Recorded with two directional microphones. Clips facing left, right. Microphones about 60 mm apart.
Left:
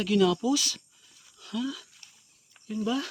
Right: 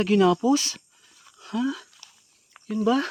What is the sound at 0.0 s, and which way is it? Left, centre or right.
Speech, right.